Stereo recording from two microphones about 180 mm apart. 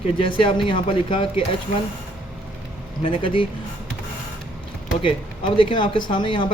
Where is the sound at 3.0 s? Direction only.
30° left (ahead or behind).